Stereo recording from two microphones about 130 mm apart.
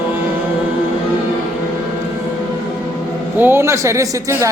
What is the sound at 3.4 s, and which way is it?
Speech, 20° right (ahead or behind).